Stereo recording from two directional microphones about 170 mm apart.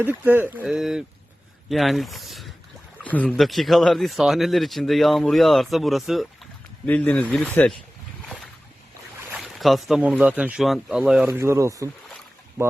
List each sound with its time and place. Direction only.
0.0 s speech: 10° right (ahead or behind); by 7.8 s 10° left (ahead or behind)
9.3 s speech: centre (ahead or behind)
11.3 s speech: 15° right (ahead or behind)